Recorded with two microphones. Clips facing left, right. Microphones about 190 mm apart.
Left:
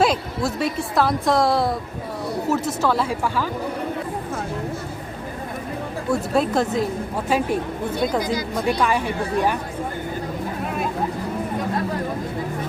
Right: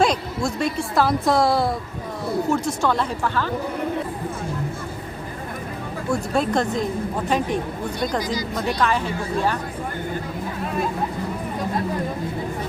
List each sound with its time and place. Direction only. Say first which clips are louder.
0.0 s a woman's voice: even; 5° left (ahead or behind)
6.1 s a woman's voice: left 1 dB; centre (ahead or behind)
8.2 s speech: left 2 dB; 55° left (ahead or behind)
8.5 s speech: left 1 dB; 10° left (ahead or behind)